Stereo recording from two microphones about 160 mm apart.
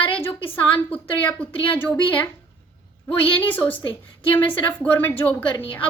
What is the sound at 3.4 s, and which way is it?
Speech, 10° left (ahead or behind).